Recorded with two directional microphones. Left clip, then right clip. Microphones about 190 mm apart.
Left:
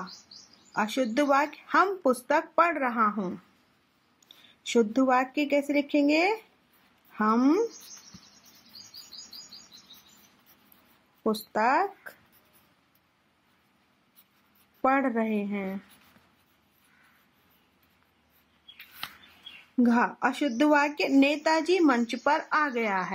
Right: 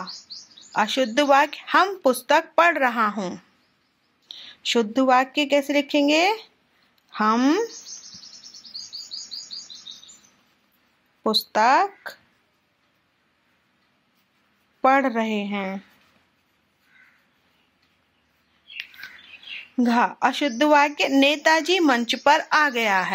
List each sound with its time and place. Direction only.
0.7 s speech: 10° right (ahead or behind)
4.6 s speech: 10° right (ahead or behind)
11.2 s speech: 15° right (ahead or behind)
14.8 s a woman's voice: 20° right (ahead or behind)
20.2 s speech: 10° right (ahead or behind)